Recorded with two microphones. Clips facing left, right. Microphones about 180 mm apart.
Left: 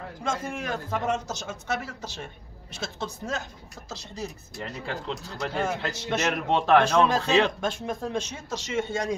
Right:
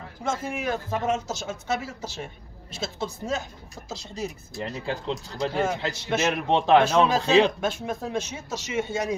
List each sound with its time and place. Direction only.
0.2 s speech: 5° right (ahead or behind)
4.8 s speech: 25° right (ahead or behind)
5.7 s speech: 15° right (ahead or behind)
6.4 s speech: 20° right (ahead or behind)
6.8 s speech: 5° right (ahead or behind)